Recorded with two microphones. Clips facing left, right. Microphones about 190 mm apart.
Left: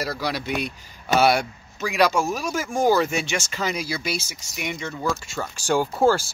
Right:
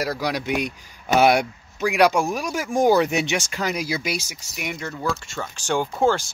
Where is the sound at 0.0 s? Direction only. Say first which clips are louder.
Right 2 dB; 15° right (ahead or behind).